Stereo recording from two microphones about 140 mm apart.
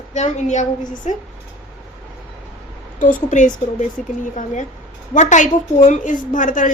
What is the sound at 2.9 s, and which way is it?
Speech, 70° left (ahead or behind).